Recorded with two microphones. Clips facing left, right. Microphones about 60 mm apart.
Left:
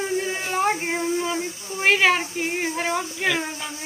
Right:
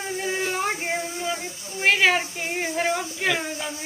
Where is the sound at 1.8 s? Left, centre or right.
Centre.